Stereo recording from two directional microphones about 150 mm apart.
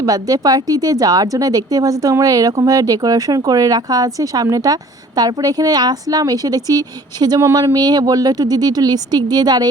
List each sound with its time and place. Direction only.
0.0 s speech: 25° right (ahead or behind)